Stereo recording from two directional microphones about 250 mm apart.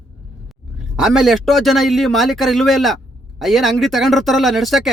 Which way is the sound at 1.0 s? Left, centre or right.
Centre.